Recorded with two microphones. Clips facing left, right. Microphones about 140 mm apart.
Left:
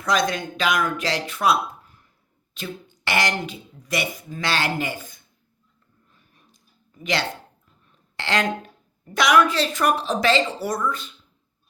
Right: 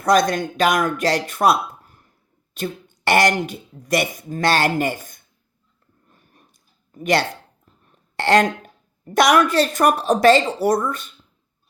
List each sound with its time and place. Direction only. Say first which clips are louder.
0.0 s speech: right 6 dB; 45° right (ahead or behind)
6.1 s a sound: right 7 dB; 50° right (ahead or behind)
6.9 s a woman's voice: right 6 dB; 50° right (ahead or behind)